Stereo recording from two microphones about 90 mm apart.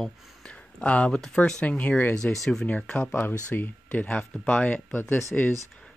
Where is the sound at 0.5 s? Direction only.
15° left (ahead or behind).